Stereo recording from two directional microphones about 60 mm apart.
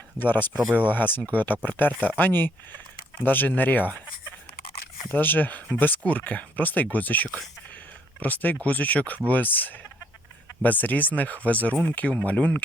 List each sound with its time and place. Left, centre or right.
0.2 s speech: left
5.1 s speech: left